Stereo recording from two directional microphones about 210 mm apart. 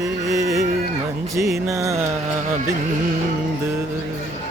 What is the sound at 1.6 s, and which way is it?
Music, 15° right (ahead or behind).